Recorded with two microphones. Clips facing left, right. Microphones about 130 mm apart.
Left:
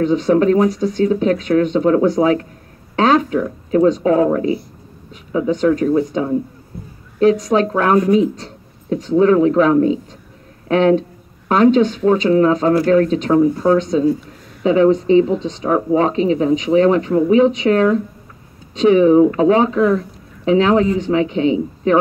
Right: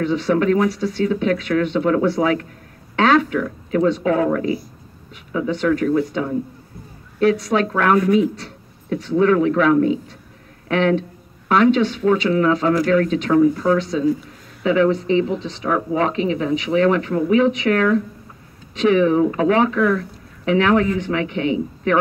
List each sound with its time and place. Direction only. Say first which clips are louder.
0.0 s speech: left 4 dB; 40° left (ahead or behind)
5.5 s speech: left 3 dB; 35° left (ahead or behind)
7.2 s a woman's voice: left 4 dB; 40° left (ahead or behind)
13.7 s speech: left 4 dB; 40° left (ahead or behind); by 21.9 s 25° left (ahead or behind)